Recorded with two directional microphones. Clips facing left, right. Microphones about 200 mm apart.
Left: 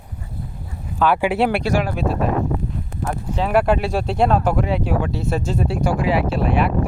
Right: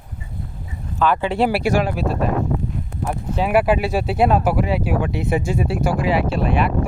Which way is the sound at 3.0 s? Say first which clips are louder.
Right 1 dB; 10° right (ahead or behind).